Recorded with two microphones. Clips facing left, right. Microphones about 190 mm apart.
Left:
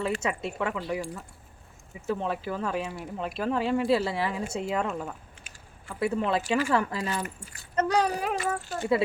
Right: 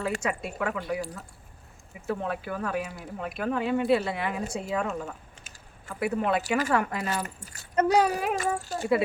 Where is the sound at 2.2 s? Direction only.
25° left (ahead or behind).